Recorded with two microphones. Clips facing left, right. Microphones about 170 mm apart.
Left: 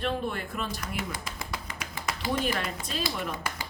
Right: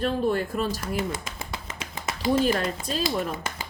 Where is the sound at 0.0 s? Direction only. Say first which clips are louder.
Right 6 dB; 35° right (ahead or behind).